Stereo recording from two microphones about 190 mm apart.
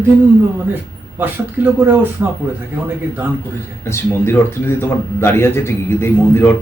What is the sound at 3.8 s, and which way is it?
Speech, 15° left (ahead or behind).